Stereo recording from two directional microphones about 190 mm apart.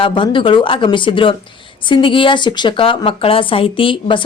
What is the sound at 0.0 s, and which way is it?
A woman's voice, 25° left (ahead or behind).